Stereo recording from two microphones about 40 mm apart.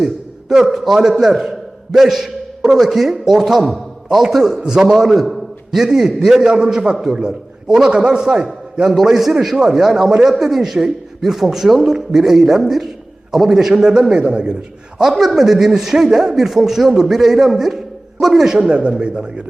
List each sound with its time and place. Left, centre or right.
0.0 s a man's voice: centre
4.9 s a man's voice: centre
9.0 s a man's voice: centre; by 14.5 s right
14.9 s a man's voice: centre
18.5 s a man's voice: right